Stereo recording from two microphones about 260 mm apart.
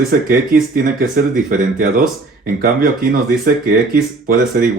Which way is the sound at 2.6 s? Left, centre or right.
Right.